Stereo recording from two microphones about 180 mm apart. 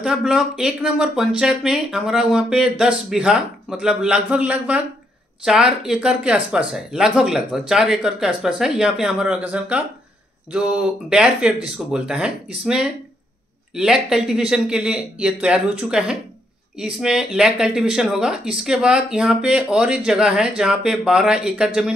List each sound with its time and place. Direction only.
0.0 s speech: 5° right (ahead or behind)